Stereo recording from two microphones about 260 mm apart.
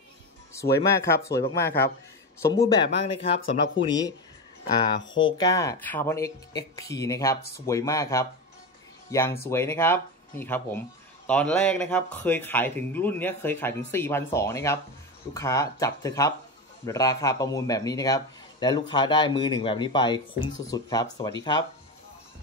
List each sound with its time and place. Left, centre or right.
0.5 s music: centre
0.9 s speech: centre
3.3 s speech: left
5.0 s speech: left
5.4 s speech: centre